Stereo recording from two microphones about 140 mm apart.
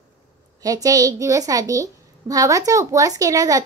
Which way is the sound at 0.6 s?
25° right (ahead or behind).